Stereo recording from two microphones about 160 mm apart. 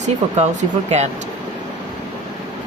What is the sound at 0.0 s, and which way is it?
Speech, 45° right (ahead or behind).